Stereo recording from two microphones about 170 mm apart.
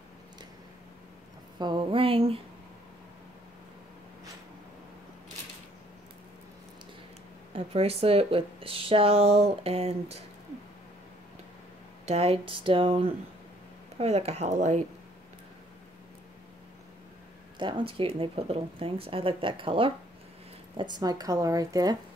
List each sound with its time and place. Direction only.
1.6 s speech: 30° right (ahead or behind)
7.5 s speech: 35° right (ahead or behind)
12.1 s speech: 35° right (ahead or behind)
17.6 s speech: 30° right (ahead or behind)